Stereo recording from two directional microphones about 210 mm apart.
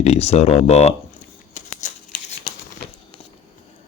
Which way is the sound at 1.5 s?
35° left (ahead or behind).